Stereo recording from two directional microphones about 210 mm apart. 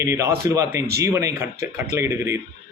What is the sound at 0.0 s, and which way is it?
A man's voice, 15° right (ahead or behind).